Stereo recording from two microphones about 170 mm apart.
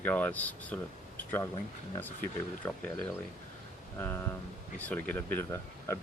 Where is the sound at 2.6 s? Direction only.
15° left (ahead or behind).